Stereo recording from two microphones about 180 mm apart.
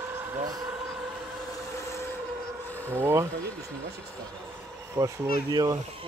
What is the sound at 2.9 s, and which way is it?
Speech, 15° right (ahead or behind).